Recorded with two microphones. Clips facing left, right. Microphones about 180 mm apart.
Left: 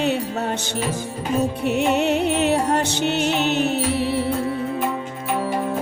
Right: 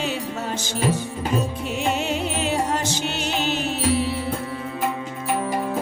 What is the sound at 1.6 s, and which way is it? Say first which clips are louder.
Music: left 5 dB; 65° left (ahead or behind).